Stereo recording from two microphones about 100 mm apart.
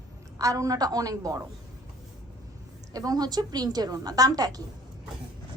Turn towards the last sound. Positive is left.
turn(degrees=-40)  # may be behind; listen again after turning